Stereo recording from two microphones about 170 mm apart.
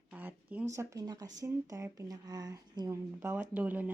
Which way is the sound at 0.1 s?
10° right (ahead or behind).